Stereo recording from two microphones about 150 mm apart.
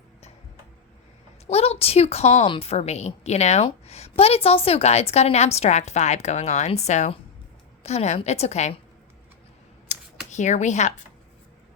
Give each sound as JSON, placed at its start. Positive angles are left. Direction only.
{"t": 1.5, "sound": "a woman's voice", "side_deg": 45}
{"t": 9.9, "sound": "computer keyboard", "side_deg": 55}
{"t": 10.3, "sound": "a woman's voice", "side_deg": 50}